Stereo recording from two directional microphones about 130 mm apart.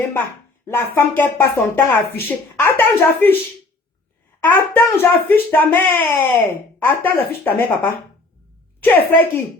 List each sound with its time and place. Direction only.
0.7 s speech: 20° left (ahead or behind)
4.4 s speech: 15° left (ahead or behind)